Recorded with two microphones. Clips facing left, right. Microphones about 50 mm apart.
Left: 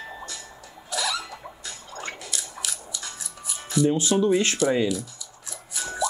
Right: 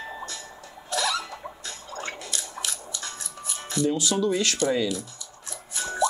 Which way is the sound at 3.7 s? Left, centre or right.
Left.